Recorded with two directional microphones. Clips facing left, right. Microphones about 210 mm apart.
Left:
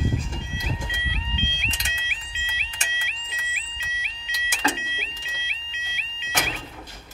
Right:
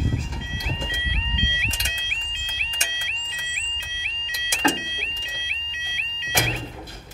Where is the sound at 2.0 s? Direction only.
10° left (ahead or behind).